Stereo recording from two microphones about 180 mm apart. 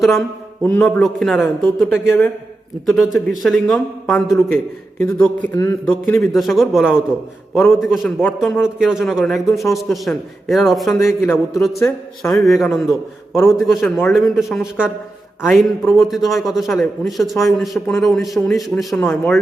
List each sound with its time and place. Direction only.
0.6 s a man's voice: 5° left (ahead or behind)
5.2 s a man's voice: 15° left (ahead or behind)
5.9 s a man's voice: centre (ahead or behind)
10.9 s a man's voice: 15° left (ahead or behind)
11.6 s a man's voice: centre (ahead or behind)